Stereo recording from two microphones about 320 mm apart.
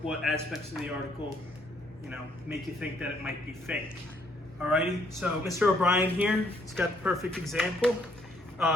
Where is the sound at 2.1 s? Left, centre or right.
Centre.